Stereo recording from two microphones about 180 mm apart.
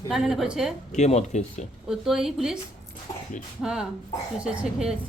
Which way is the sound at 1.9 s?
Centre (ahead or behind).